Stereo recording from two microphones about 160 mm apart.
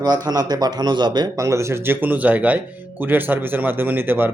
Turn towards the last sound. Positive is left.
turn(degrees=-15)  # may be behind; listen again after turning